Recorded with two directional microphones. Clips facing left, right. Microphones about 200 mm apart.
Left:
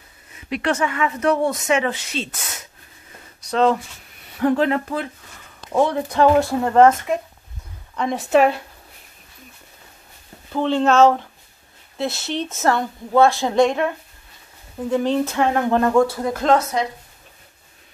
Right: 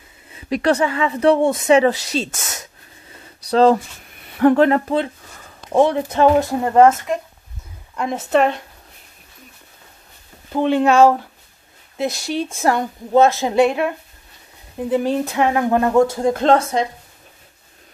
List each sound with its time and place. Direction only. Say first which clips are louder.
0.5 s a woman's voice: right 4 dB; 35° right (ahead or behind)
3.4 s speech: right 5 dB; 35° right (ahead or behind)
4.4 s speech: right 5 dB; 60° right (ahead or behind)
4.6 s a woman's voice: right 4 dB; 40° right (ahead or behind)
5.7 s a woman's voice: right 3 dB; 20° right (ahead or behind); by 8.6 s 5° left (ahead or behind)
10.5 s speech: right 2 dB; 15° right (ahead or behind)
15.9 s speech: right 2 dB; 25° right (ahead or behind)